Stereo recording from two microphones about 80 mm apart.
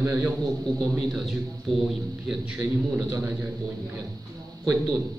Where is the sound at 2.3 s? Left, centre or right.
Centre.